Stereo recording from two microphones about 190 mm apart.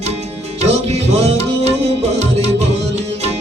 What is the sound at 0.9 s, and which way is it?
Music, 35° right (ahead or behind).